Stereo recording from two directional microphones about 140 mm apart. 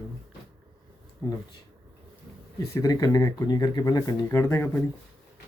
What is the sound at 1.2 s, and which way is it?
Speech, 25° left (ahead or behind).